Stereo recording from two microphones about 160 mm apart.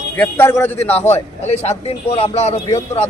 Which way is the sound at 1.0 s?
45° left (ahead or behind).